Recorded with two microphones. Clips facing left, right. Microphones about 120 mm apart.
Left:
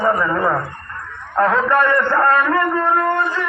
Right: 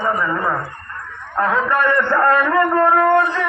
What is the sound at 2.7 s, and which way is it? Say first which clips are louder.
Speech: right 4 dB; 50° right (ahead or behind).